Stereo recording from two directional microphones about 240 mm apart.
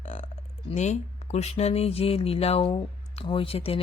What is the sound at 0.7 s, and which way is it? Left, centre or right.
Speech, left.